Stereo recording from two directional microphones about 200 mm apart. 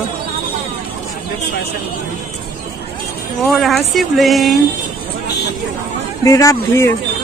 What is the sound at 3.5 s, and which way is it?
Speech, centre (ahead or behind).